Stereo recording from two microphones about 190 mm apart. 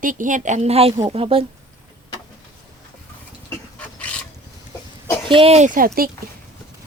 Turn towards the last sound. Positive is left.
turn(degrees=-50)  # may be behind; listen again after turning